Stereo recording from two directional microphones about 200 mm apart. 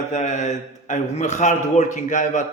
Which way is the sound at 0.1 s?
35° left (ahead or behind).